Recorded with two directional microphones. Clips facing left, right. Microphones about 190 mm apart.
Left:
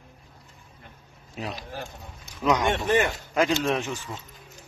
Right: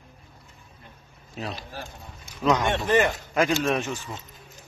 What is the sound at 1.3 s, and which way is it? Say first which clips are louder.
Speech: even; 10° left (ahead or behind).